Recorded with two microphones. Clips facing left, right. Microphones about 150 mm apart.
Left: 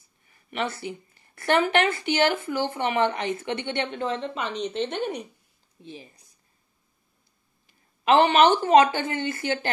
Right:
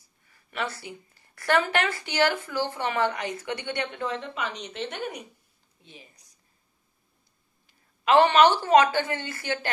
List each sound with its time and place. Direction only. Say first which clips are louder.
0.5 s speech: left 3 dB; 25° left (ahead or behind)
8.0 s a woman's voice: even; 25° left (ahead or behind)